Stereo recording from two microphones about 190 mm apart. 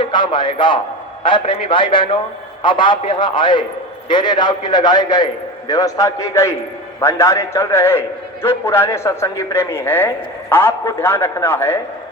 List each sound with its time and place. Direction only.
0.0 s a man's voice: 25° left (ahead or behind)